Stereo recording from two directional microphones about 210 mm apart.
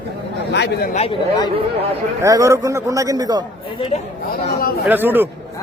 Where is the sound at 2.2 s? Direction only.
15° right (ahead or behind).